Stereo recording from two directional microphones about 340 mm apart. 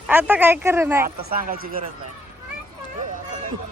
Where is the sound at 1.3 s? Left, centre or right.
Right.